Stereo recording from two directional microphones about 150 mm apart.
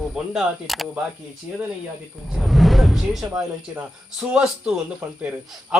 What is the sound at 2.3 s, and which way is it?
Speech, centre (ahead or behind).